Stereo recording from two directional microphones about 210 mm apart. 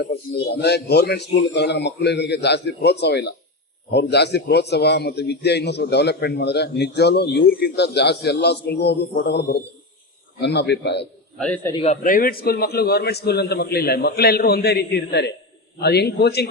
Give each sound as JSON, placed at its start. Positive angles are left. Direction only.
{"t": 0.1, "sound": "a man's voice", "side_deg": 50}
{"t": 11.3, "sound": "a man's voice", "side_deg": 5}
{"t": 11.7, "sound": "a man's voice", "side_deg": 30}
{"t": 12.0, "sound": "a man's voice", "side_deg": 40}